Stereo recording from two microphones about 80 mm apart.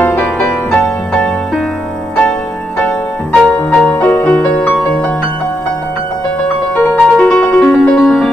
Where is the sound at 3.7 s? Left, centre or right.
Centre.